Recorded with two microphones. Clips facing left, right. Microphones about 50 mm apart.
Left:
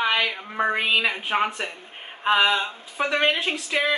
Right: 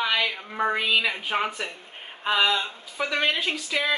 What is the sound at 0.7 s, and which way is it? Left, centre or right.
Speech, left.